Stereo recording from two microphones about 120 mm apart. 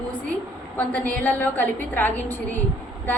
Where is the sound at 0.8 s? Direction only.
15° left (ahead or behind).